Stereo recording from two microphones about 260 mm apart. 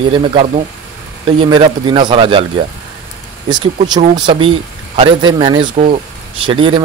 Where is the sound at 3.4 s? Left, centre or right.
Centre.